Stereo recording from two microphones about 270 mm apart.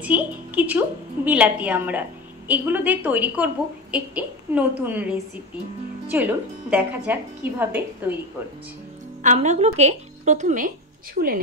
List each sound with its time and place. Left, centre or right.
0.0 s a woman's voice: centre
6.0 s a woman's voice: centre
9.2 s a woman's voice: right